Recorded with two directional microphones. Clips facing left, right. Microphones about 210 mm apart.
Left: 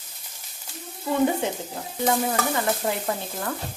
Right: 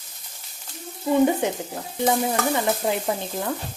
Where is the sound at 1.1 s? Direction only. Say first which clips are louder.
Right 3 dB; 15° right (ahead or behind).